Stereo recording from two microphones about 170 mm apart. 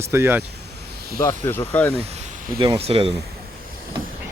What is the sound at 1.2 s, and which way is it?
Speech, 15° left (ahead or behind).